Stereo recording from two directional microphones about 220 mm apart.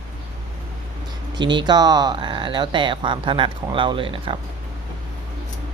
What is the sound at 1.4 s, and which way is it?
Speech, 20° right (ahead or behind).